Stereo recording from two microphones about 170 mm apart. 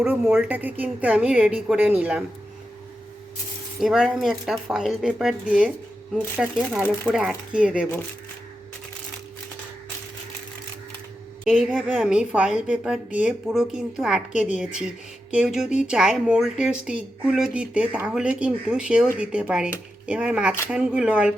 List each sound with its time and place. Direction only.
0.0 s a woman's voice: 5° right (ahead or behind)
3.8 s a woman's voice: 5° right (ahead or behind)
11.4 s a woman's voice: 5° right (ahead or behind)